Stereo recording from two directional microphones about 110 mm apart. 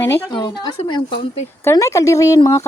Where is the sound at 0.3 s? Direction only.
45° left (ahead or behind).